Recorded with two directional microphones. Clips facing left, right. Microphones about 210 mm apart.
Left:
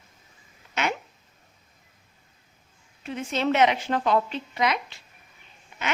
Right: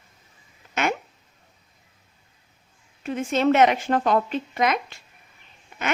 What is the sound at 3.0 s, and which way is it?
A woman's voice, 50° right (ahead or behind).